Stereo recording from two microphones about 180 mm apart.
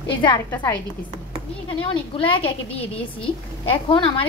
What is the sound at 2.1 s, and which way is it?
Speech, 30° left (ahead or behind).